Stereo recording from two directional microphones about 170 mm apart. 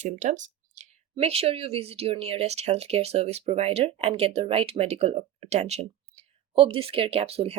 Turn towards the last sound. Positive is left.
turn(degrees=-35)  # may be behind; listen again after turning